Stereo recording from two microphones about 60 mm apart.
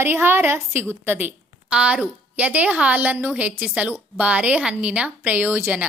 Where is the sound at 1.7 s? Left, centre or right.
Right.